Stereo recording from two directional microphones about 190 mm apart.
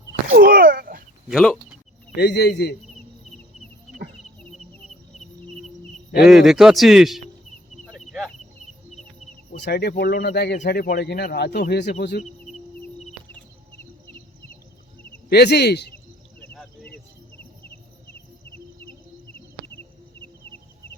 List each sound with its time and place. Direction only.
0.3 s a sound: 50° right (ahead or behind)
1.3 s speech: centre (ahead or behind)
2.1 s speech: 60° left (ahead or behind)
6.2 s speech: centre (ahead or behind)
7.9 s cricket: centre (ahead or behind)
9.6 s speech: 60° left (ahead or behind)
15.3 s speech: 60° left (ahead or behind)
16.4 s insect: 10° left (ahead or behind)